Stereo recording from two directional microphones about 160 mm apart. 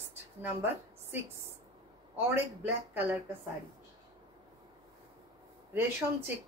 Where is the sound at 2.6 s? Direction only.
10° right (ahead or behind).